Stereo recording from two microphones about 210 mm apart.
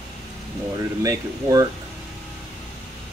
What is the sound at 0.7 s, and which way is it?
Speech, 15° right (ahead or behind).